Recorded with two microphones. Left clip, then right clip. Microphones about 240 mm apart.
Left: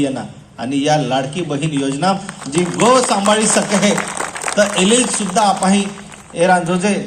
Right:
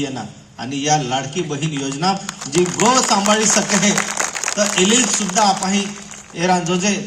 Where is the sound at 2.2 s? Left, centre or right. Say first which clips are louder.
Right 1 dB; right.